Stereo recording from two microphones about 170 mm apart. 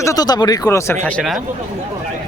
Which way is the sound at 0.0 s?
20° left (ahead or behind).